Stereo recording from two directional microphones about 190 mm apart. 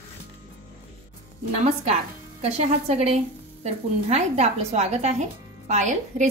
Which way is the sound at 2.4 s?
35° right (ahead or behind).